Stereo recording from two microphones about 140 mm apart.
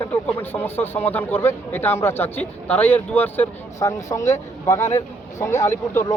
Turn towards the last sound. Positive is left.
turn(degrees=20)  # may be behind; listen again after turning